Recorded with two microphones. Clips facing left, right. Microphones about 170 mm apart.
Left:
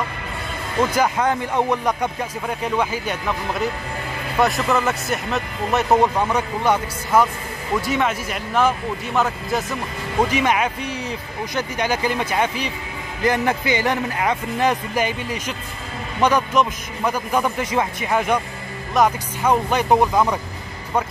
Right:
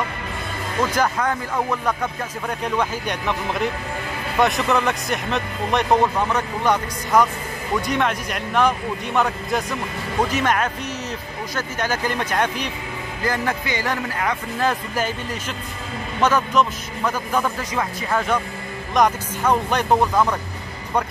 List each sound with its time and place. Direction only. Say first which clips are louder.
1.1 s speech: left 3 dB; 25° left (ahead or behind); by 12.6 s 10° left (ahead or behind)
13.2 s speech: left 4 dB; 20° left (ahead or behind)